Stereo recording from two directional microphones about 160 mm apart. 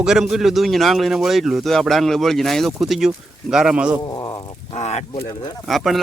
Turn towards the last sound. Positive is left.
turn(degrees=0)  # may be behind; listen again after turning